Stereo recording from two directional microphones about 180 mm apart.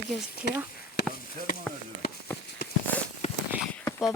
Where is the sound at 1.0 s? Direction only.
75° left (ahead or behind).